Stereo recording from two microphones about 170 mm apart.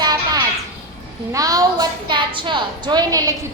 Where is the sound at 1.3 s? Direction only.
20° right (ahead or behind).